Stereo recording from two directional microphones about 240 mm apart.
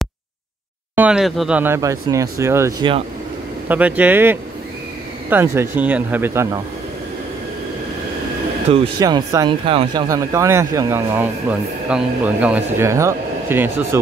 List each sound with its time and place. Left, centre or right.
0.9 s speech: centre
8.6 s speech: right